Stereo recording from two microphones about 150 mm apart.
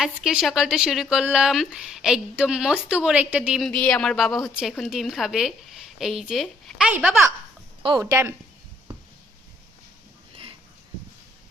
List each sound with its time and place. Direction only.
0.0 s a woman's voice: 5° right (ahead or behind)
3.7 s a woman's voice: 5° left (ahead or behind)
7.8 s speech: 35° right (ahead or behind)
8.1 s speech: 20° right (ahead or behind)